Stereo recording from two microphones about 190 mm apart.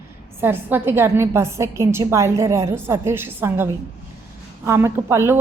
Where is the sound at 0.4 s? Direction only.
10° right (ahead or behind).